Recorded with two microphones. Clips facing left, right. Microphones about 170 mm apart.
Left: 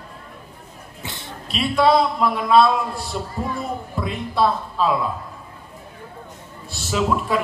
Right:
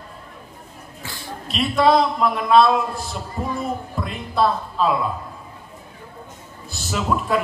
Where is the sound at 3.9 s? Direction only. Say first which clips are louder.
Left 1 dB; centre (ahead or behind).